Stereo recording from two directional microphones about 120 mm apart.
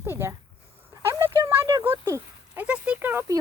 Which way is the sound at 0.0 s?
20° right (ahead or behind).